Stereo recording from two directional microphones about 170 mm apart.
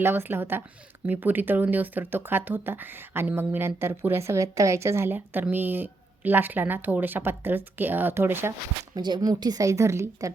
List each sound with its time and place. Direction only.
0.0 s speech: 15° right (ahead or behind)
9.0 s speech: 25° right (ahead or behind)